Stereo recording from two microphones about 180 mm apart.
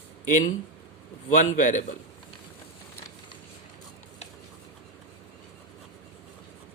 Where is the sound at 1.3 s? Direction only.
45° left (ahead or behind).